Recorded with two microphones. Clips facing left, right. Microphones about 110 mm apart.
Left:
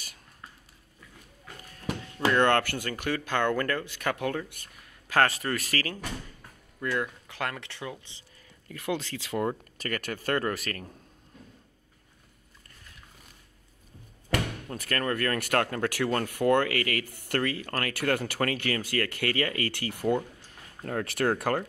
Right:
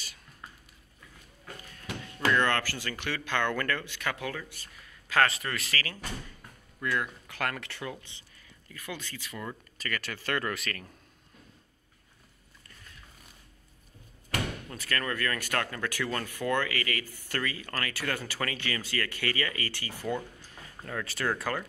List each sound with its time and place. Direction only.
2.1 s a sound: 20° left (ahead or behind)
2.4 s speech: 55° left (ahead or behind)
2.9 s speech: 45° left (ahead or behind)
6.8 s speech: 25° left (ahead or behind)
8.6 s speech: 65° left (ahead or behind); by 9.4 s 85° left
9.4 s speech: 50° left (ahead or behind)
14.8 s speech: 45° left (ahead or behind)